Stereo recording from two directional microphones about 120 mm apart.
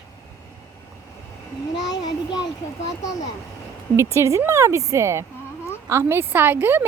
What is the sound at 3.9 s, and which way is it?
A woman's voice, 25° right (ahead or behind).